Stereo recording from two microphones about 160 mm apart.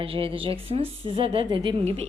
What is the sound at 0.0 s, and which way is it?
A woman's voice, 35° right (ahead or behind).